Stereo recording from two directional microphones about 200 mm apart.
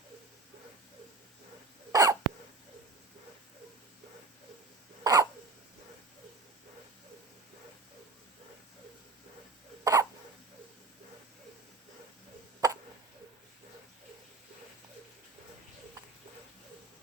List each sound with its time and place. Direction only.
1.9 s hiccup: 15° right (ahead or behind)
5.0 s hiccup: 20° right (ahead or behind)
9.8 s hiccup: 15° right (ahead or behind)
12.6 s hiccup: 20° right (ahead or behind)